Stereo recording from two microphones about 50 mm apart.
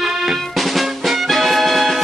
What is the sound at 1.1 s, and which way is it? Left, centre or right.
Music, centre.